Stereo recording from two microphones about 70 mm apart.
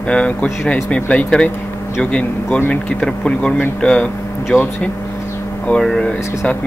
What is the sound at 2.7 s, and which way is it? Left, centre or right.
Speech, centre.